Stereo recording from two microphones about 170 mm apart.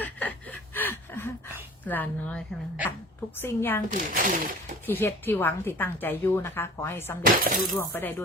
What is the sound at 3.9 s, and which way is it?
Speech, 50° right (ahead or behind).